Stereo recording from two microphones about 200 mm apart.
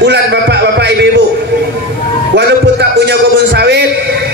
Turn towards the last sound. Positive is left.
turn(degrees=-60)  # may be behind; listen again after turning